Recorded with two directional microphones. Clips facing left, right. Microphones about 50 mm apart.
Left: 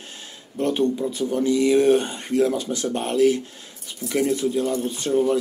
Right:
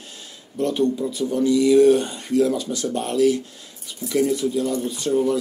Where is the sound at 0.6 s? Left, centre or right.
Left.